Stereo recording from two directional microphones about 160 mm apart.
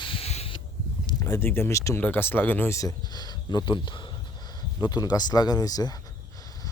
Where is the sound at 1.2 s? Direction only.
15° left (ahead or behind).